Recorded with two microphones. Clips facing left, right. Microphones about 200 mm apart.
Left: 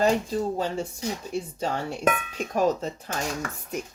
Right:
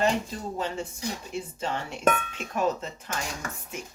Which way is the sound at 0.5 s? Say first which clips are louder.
Left 3 dB; 35° left (ahead or behind).